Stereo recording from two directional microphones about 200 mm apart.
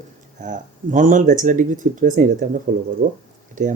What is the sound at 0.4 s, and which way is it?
Speech, 40° right (ahead or behind).